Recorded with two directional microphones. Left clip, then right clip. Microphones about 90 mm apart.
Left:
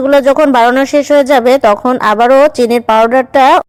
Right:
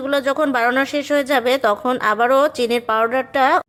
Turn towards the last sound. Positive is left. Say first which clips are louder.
# left 10 dB
turn(degrees=35)  # may be behind; listen again after turning